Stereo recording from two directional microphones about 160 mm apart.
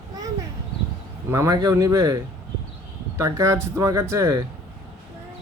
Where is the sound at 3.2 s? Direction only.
20° right (ahead or behind).